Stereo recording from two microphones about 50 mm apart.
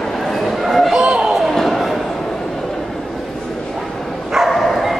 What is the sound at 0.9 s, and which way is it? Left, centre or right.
Slam, right.